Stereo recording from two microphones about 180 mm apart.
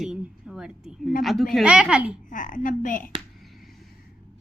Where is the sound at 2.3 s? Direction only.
45° left (ahead or behind).